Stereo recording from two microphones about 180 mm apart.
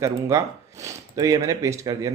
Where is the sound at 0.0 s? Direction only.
15° right (ahead or behind).